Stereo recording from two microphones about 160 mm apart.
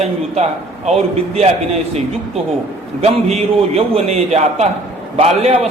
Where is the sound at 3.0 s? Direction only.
40° right (ahead or behind).